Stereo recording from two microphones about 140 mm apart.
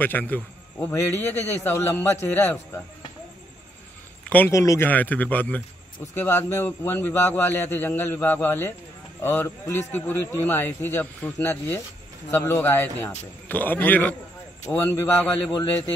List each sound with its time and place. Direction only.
0.0 s speech: 15° left (ahead or behind)
4.3 s speech: 15° left (ahead or behind)